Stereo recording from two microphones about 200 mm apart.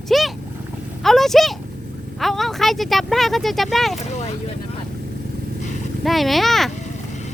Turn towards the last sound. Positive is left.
turn(degrees=0)  # may be behind; listen again after turning